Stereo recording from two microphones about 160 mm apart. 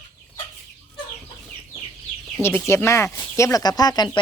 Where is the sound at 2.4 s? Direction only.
15° left (ahead or behind).